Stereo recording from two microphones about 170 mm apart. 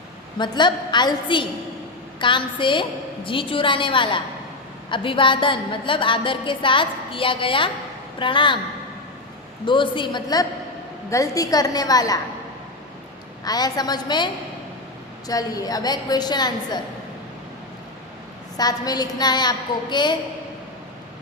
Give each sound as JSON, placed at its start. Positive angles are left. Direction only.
{"t": 0.3, "sound": "a woman's voice", "side_deg": 25}
{"t": 9.6, "sound": "a woman's voice", "side_deg": 30}
{"t": 13.4, "sound": "a woman's voice", "side_deg": 20}
{"t": 15.3, "sound": "a woman's voice", "side_deg": 20}
{"t": 18.5, "sound": "a woman's voice", "side_deg": 25}